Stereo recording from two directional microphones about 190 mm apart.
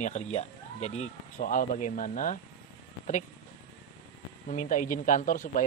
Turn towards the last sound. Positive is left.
turn(degrees=45)  # may be behind; listen again after turning